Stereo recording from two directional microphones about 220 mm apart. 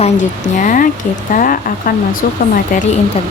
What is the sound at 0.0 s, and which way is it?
Speech, 35° left (ahead or behind).